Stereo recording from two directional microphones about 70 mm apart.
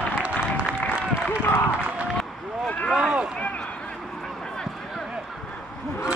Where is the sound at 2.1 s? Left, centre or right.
Centre.